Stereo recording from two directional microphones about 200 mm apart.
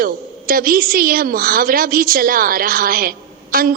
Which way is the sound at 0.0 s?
45° right (ahead or behind).